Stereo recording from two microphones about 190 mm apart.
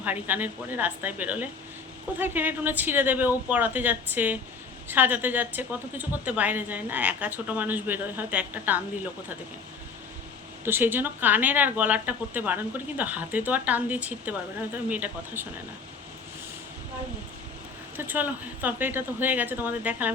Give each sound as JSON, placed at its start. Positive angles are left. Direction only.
{"t": 0.0, "sound": "speech", "side_deg": -10}
{"t": 10.6, "sound": "speech", "side_deg": -10}
{"t": 17.9, "sound": "speech", "side_deg": -10}